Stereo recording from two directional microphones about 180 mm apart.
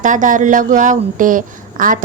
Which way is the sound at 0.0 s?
45° right (ahead or behind).